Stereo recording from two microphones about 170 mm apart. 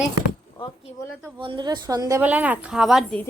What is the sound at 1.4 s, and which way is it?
Speech, 25° right (ahead or behind).